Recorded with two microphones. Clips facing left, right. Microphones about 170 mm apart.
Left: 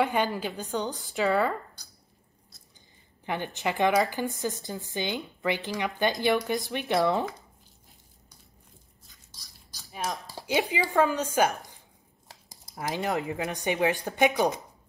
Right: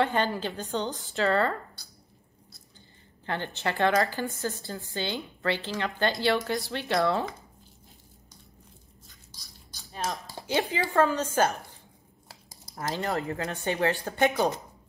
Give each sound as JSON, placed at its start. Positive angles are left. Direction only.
{"t": 0.0, "sound": "a woman's voice", "side_deg": 10}
{"t": 3.3, "sound": "a woman's voice", "side_deg": 15}
{"t": 9.9, "sound": "a woman's voice", "side_deg": 10}